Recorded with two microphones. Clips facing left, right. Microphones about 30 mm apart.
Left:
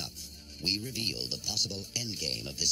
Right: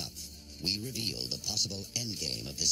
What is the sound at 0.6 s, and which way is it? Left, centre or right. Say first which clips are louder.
Speech: left 2 dB; left.